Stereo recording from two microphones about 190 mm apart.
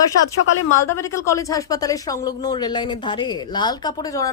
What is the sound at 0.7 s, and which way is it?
Speech, 15° left (ahead or behind).